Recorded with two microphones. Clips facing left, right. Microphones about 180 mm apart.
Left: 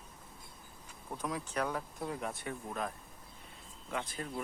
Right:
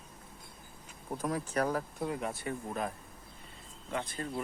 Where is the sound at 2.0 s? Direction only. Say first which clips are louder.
Right 3 dB; centre (ahead or behind).